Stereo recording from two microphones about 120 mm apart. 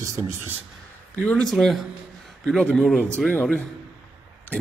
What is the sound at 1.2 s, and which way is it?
A man's voice, 10° left (ahead or behind).